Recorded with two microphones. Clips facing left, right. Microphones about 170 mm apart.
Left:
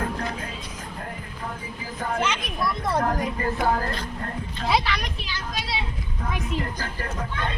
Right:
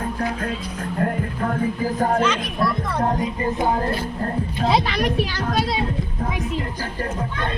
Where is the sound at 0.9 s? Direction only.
60° right (ahead or behind); by 2.2 s 45° right (ahead or behind).